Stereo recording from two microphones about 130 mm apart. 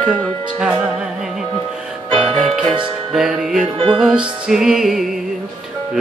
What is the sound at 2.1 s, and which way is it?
Music, 50° right (ahead or behind).